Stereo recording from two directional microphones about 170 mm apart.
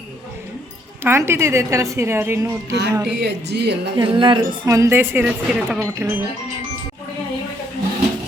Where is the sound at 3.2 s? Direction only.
80° right.